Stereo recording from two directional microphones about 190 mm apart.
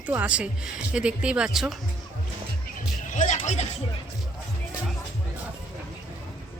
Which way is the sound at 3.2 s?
40° left (ahead or behind).